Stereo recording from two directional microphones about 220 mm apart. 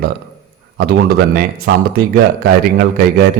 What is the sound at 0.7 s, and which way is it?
Speech, 45° right (ahead or behind).